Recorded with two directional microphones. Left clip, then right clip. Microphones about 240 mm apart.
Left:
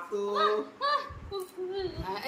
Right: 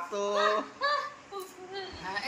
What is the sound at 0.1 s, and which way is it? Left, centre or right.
Speech, centre.